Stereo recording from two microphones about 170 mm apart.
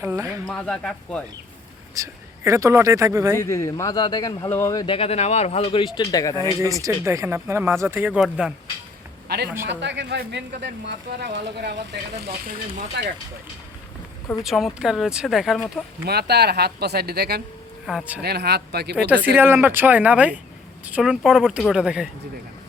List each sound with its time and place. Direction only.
0.0 s speech: 15° right (ahead or behind)
0.3 s speech: 5° left (ahead or behind)
2.0 s speech: 15° right (ahead or behind)
3.3 s speech: 15° left (ahead or behind)
4.9 s speech: 35° left (ahead or behind); by 6.6 s 20° left (ahead or behind)
6.8 s speech: 20° right (ahead or behind)
9.3 s speech: 75° right (ahead or behind)
9.6 s speech: 90° right; by 12.5 s 75° right (ahead or behind)
14.4 s speech: centre (ahead or behind)
16.0 s speech: 70° right (ahead or behind)
17.8 s speech: 5° right (ahead or behind)
18.2 s speech: 70° right (ahead or behind)
18.9 s speech: 10° right (ahead or behind)